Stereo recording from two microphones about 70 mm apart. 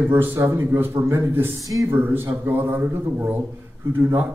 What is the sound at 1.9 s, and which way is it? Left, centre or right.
A man's voice, right.